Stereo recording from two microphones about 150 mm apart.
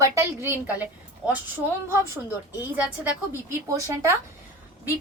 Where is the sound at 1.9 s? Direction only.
15° right (ahead or behind).